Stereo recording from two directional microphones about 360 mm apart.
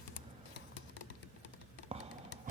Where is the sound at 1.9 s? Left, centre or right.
Centre.